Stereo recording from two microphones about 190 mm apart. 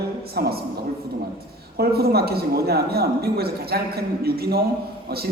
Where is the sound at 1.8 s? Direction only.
55° right (ahead or behind).